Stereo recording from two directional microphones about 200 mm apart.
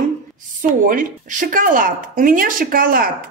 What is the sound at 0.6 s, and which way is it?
A woman's voice, 40° right (ahead or behind).